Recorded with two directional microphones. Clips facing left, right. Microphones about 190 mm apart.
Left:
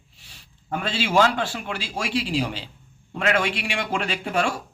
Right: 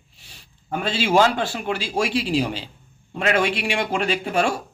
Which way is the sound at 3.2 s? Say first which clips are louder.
Right 2 dB; 30° right (ahead or behind).